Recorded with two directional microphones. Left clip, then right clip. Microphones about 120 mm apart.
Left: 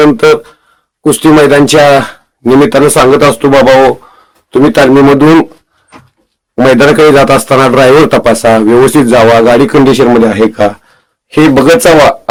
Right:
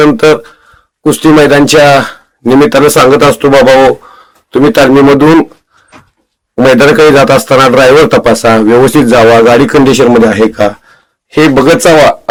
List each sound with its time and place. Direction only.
0.0 s a man's voice: 10° right (ahead or behind)
6.6 s a man's voice: centre (ahead or behind)
11.3 s a man's voice: 20° left (ahead or behind)